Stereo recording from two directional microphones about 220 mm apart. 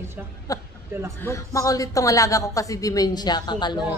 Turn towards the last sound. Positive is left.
turn(degrees=20)  # may be behind; listen again after turning